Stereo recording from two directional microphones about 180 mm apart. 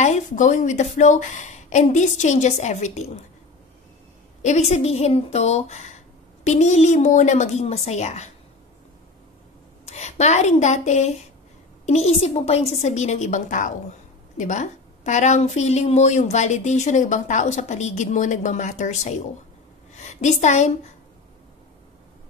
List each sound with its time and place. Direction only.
0.0 s a woman's voice: 40° left (ahead or behind)
4.4 s a woman's voice: 40° left (ahead or behind)
9.8 s a woman's voice: 40° left (ahead or behind)